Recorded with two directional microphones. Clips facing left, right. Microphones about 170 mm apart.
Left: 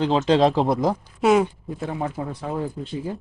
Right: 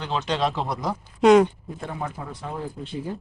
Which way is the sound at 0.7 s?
50° left (ahead or behind).